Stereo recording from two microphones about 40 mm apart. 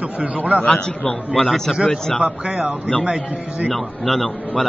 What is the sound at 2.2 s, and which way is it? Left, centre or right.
Speech, right.